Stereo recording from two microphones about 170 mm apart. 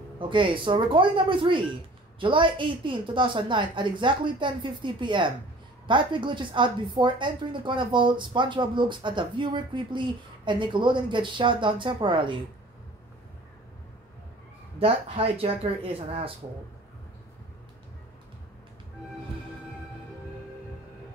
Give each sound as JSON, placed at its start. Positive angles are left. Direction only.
{"t": 0.2, "sound": "speech", "side_deg": -30}
{"t": 14.8, "sound": "speech", "side_deg": -35}